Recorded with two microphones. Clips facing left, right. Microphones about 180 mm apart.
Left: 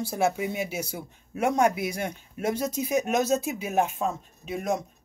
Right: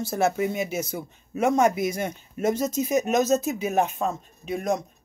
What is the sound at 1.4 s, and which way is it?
Speech, 45° right (ahead or behind).